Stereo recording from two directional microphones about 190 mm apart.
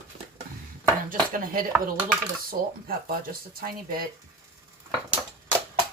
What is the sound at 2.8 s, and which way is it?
Speech, 50° right (ahead or behind).